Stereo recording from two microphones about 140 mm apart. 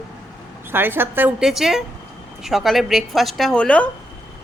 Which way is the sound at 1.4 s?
5° right (ahead or behind).